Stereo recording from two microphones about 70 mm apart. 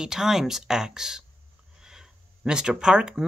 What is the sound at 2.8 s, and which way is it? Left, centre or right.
Speech, centre.